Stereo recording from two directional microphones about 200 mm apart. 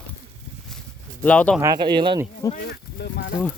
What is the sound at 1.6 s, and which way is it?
Speech, 20° right (ahead or behind).